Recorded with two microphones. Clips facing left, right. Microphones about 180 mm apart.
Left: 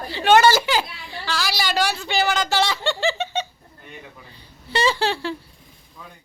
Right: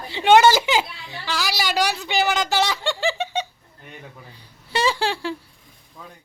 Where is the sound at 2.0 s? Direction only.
15° right (ahead or behind).